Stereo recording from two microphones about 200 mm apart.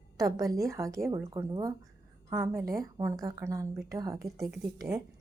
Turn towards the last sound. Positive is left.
turn(degrees=-20)  # may be behind; listen again after turning